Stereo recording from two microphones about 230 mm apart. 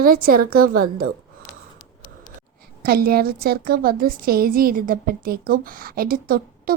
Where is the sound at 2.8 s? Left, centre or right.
Right.